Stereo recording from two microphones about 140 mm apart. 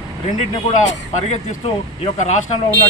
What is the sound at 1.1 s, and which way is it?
A man's voice, 55° left (ahead or behind).